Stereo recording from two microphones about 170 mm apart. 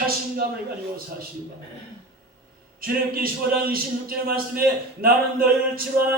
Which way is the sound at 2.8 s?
60° right (ahead or behind).